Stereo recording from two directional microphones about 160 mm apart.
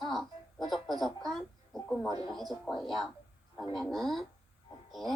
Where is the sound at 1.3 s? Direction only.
Centre (ahead or behind).